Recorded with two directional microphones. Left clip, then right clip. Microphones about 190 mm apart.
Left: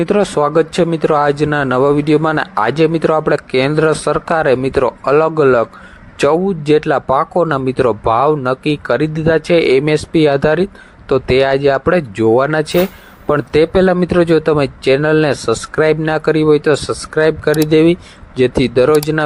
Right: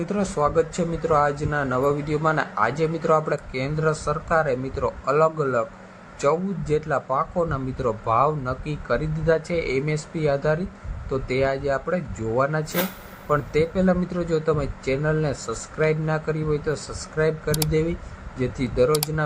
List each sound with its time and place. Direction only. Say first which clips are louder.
0.0 s speech: left 10 dB; 40° left (ahead or behind)